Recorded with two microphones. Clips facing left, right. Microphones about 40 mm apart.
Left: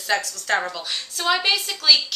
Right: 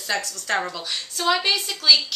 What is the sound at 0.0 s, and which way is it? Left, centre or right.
A woman's voice, centre.